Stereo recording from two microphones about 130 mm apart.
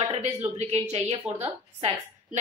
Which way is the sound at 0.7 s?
60° right (ahead or behind).